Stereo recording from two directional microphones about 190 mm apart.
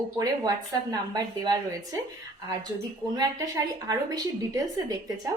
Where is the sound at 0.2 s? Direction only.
20° right (ahead or behind).